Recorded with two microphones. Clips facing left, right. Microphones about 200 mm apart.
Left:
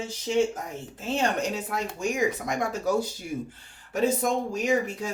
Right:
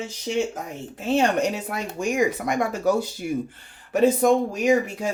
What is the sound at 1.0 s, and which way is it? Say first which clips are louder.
Speech: right 6 dB; 65° right (ahead or behind).